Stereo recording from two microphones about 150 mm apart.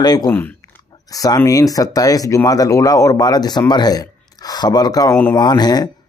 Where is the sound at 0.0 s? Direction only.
25° left (ahead or behind).